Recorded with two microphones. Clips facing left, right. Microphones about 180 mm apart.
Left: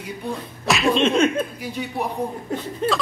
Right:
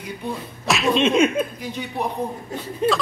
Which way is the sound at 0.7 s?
Centre (ahead or behind).